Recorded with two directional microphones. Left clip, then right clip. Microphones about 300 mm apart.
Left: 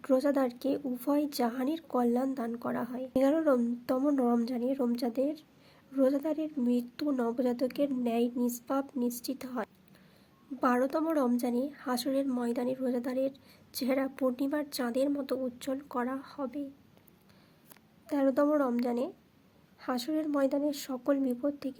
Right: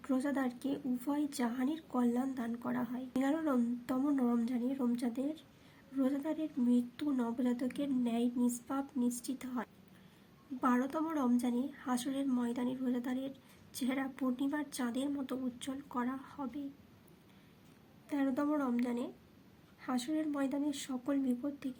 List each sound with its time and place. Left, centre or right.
0.0 s speech: centre
18.1 s speech: left